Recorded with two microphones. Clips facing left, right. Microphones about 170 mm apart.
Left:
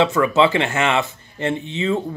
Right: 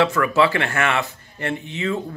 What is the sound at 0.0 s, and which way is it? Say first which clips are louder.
Speech: left 2 dB; 25° left (ahead or behind).